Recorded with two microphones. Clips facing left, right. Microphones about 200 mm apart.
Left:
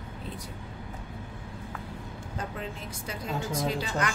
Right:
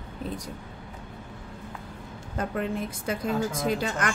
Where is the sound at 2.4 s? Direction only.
55° right (ahead or behind).